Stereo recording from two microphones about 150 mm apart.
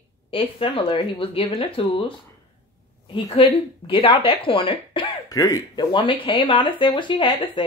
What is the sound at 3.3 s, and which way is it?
Speech, 35° left (ahead or behind).